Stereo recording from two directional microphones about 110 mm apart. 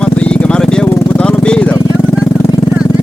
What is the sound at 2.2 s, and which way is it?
Vehicle, 25° left (ahead or behind).